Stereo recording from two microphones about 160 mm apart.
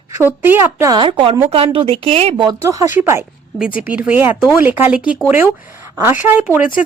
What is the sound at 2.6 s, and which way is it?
A woman's voice, 20° right (ahead or behind).